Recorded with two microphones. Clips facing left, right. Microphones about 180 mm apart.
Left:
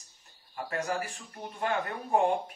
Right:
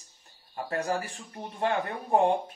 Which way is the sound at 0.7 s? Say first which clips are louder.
Right 3 dB; 30° right (ahead or behind).